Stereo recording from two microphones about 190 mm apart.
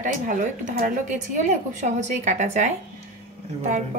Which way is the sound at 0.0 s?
40° right (ahead or behind).